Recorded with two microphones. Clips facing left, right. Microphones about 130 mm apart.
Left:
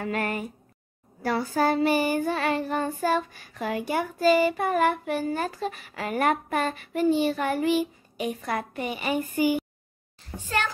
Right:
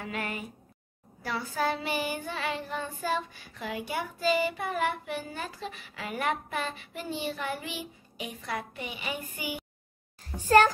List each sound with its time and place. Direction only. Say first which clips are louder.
0.0 s child singing: left 7 dB; 50° left (ahead or behind)
10.4 s a child's voice: right 8 dB; 40° right (ahead or behind)